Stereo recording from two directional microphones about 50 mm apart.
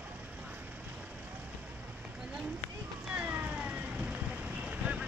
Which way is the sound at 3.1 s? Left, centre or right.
Right.